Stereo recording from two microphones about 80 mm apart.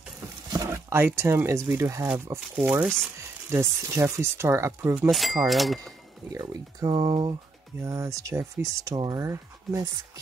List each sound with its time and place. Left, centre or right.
0.7 s speech: right
2.5 s speech: right
3.2 s speech: right
5.1 s speech: centre
6.3 s speech: right
7.8 s speech: right